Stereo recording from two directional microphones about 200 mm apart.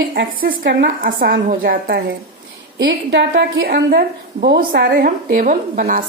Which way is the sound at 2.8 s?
60° right (ahead or behind).